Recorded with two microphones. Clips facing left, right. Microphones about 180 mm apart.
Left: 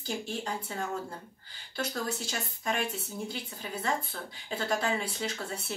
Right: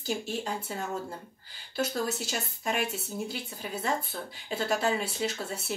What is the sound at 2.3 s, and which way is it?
Speech, 5° right (ahead or behind).